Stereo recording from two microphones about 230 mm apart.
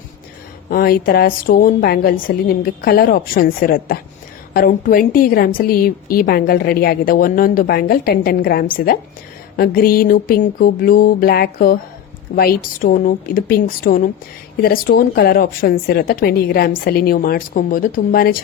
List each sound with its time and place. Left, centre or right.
0.7 s a woman's voice: left